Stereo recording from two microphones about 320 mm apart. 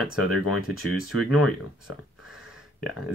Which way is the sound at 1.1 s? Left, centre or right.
Left.